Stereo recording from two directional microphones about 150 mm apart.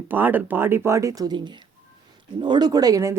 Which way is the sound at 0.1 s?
10° right (ahead or behind).